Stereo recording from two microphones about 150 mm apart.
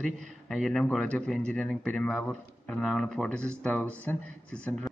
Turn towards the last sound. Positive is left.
turn(degrees=5)  # may be behind; listen again after turning